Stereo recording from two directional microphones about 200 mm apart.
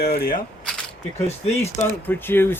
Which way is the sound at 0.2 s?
45° left (ahead or behind).